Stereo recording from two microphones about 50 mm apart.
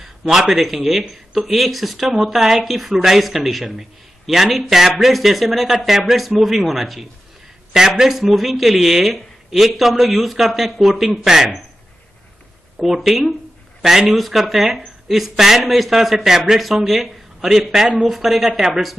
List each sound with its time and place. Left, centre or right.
0.0 s speech: centre
12.7 s speech: centre